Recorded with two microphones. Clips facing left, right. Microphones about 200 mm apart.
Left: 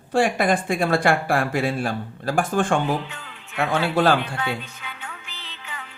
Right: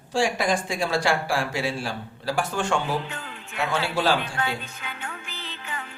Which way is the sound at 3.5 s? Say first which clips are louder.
Left 5 dB; 55° left (ahead or behind).